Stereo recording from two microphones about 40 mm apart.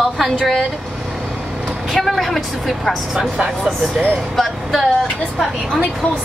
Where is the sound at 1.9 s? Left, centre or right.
Centre.